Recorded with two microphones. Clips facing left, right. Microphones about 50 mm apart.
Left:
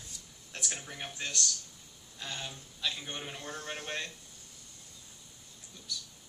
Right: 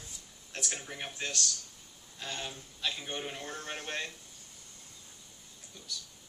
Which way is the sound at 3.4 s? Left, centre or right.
Right.